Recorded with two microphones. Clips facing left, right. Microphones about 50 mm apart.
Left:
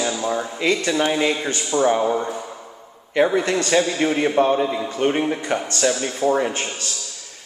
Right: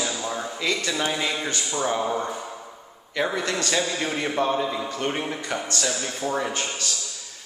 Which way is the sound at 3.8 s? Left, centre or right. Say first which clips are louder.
Left 7 dB; centre.